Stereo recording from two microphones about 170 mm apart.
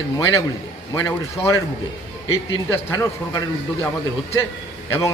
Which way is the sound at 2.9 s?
20° left (ahead or behind).